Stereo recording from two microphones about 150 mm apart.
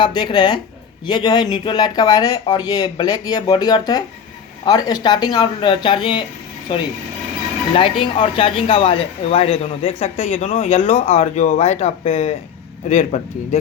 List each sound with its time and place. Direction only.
0.0 s speech: 30° left (ahead or behind)
7.7 s a man's voice: 35° left (ahead or behind)